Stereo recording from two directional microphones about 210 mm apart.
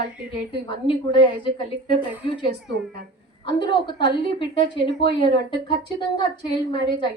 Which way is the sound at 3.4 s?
20° left (ahead or behind).